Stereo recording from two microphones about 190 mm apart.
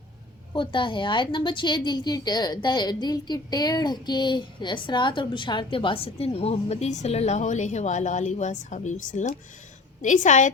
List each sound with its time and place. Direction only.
0.5 s a woman's voice: 25° left (ahead or behind)